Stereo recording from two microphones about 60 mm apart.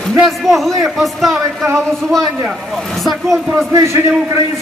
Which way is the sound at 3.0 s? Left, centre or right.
Centre.